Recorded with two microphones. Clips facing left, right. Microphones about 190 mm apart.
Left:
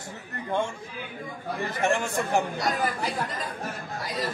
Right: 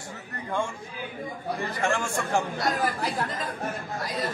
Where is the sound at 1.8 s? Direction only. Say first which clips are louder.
Left 3 dB; 20° left (ahead or behind).